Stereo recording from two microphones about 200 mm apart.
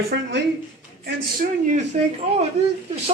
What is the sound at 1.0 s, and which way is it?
Speech, 45° right (ahead or behind).